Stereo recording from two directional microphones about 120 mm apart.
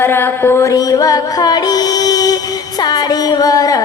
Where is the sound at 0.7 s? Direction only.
30° left (ahead or behind).